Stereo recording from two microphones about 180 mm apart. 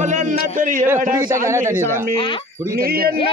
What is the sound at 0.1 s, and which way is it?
Speech, 50° right (ahead or behind).